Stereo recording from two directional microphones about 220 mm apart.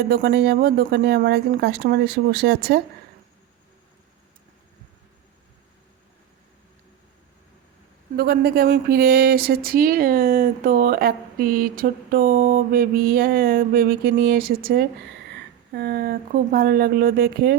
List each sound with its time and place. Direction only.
0.1 s speech: 45° right (ahead or behind)
8.1 s speech: 45° right (ahead or behind)